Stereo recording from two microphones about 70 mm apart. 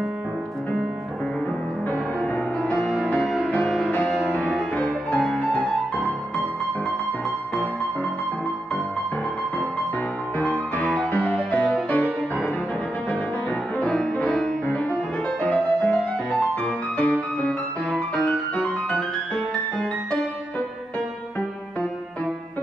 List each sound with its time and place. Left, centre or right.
2.3 s music: left
3.3 s music: centre
4.8 s music: centre
11.1 s music: left
13.7 s music: centre
15.4 s music: left